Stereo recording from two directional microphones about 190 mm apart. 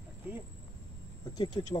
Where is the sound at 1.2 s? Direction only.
20° left (ahead or behind).